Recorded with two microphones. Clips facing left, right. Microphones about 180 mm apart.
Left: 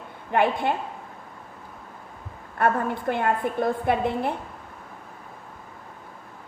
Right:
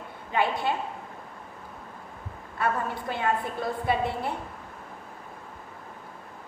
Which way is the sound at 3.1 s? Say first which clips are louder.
Left 4 dB; 55° left (ahead or behind).